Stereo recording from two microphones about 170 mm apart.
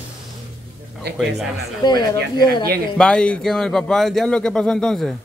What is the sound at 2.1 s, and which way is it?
Speech, 70° right (ahead or behind).